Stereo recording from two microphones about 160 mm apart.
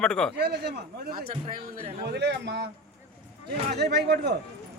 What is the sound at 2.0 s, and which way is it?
Speech, 90° right.